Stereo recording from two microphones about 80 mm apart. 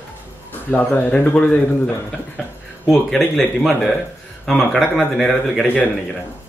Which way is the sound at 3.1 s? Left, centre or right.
Centre.